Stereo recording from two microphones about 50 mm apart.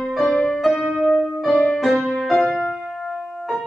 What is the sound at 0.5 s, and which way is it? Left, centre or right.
Music, centre.